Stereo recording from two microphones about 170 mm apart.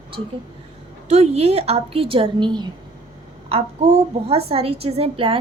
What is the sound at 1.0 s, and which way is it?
A woman's voice, 40° right (ahead or behind).